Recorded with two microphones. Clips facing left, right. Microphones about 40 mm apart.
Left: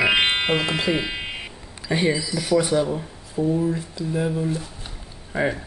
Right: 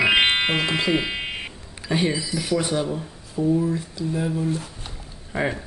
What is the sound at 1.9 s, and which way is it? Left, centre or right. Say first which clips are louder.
Speech: left 1 dB; centre.